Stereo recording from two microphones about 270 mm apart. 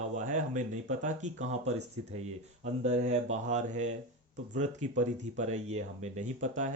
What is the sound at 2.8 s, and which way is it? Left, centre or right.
Speech, right.